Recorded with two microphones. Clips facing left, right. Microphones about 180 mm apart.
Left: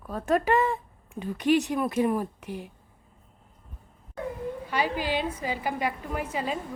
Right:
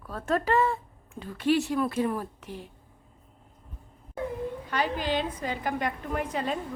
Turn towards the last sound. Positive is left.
turn(degrees=5)  # may be behind; listen again after turning